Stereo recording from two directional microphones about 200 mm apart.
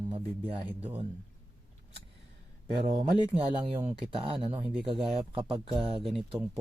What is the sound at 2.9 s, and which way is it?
Speech, 30° right (ahead or behind).